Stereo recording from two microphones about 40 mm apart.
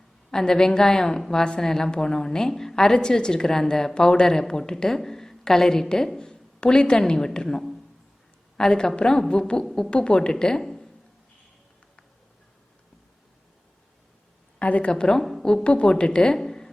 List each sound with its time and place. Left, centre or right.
0.3 s a woman's voice: centre
10.6 s a sound: centre
14.6 s a woman's voice: left
14.9 s a woman's voice: left
15.2 s a woman's voice: centre
15.6 s a woman's voice: left
16.3 s a sound: centre